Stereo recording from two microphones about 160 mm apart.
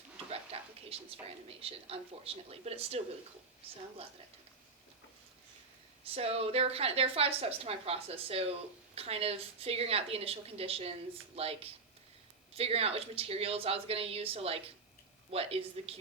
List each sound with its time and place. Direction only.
0.3 s a sound: 40° right (ahead or behind)
1.5 s a woman's voice: 35° right (ahead or behind)
6.1 s a woman's voice: 40° right (ahead or behind)